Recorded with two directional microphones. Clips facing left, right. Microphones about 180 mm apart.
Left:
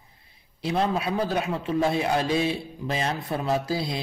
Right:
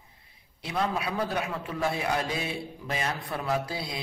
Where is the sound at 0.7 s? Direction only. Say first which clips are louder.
Left 5 dB; 30° left (ahead or behind).